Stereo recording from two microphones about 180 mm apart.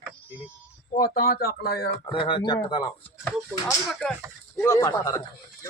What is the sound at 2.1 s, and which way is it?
Speech, 25° left (ahead or behind).